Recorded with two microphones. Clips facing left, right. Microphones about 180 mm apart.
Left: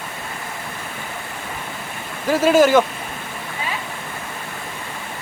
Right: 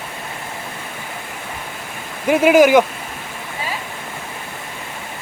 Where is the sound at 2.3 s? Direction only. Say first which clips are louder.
Right 3 dB; 15° right (ahead or behind).